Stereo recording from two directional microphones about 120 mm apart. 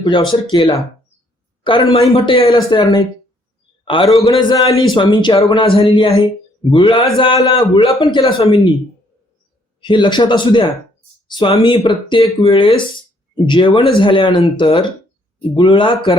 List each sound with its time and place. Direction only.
0.0 s a man's voice: 40° left (ahead or behind)
2.6 s speech: 30° left (ahead or behind)
3.8 s a man's voice: 50° left (ahead or behind)
4.4 s a man's voice: 40° left (ahead or behind)
9.8 s a man's voice: 40° left (ahead or behind)